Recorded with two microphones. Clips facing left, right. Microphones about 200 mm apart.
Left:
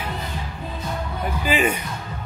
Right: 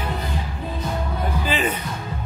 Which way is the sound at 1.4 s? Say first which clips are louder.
Left 4 dB; 10° left (ahead or behind).